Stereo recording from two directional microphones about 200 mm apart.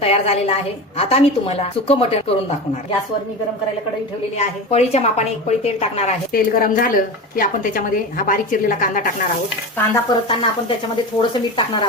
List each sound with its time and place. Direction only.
0.0 s a woman's voice: 30° left (ahead or behind)
4.4 s a woman's voice: 30° left (ahead or behind)
6.3 s a woman's voice: 45° left (ahead or behind)
10.1 s a woman's voice: 25° left (ahead or behind)